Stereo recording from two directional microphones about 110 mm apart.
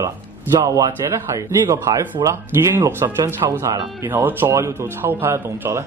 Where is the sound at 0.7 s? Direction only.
30° right (ahead or behind).